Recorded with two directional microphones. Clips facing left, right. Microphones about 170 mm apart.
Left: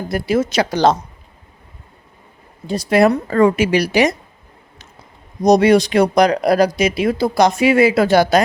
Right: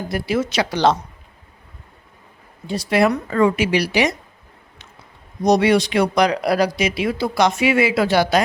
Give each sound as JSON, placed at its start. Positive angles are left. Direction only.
{"t": 0.1, "sound": "speech", "side_deg": 45}
{"t": 2.6, "sound": "speech", "side_deg": 45}
{"t": 5.4, "sound": "speech", "side_deg": 40}